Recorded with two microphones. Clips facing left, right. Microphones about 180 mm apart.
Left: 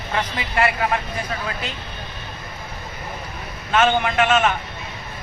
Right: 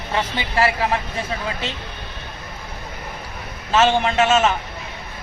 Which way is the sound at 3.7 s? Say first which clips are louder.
Right 1 dB; 25° right (ahead or behind).